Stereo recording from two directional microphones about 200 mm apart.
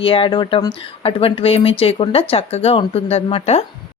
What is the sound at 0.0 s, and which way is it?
Speech, 25° left (ahead or behind).